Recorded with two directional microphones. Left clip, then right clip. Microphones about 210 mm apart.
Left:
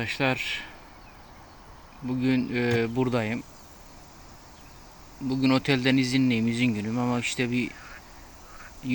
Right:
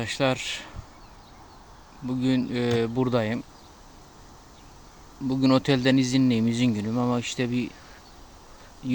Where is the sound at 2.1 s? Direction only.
10° right (ahead or behind).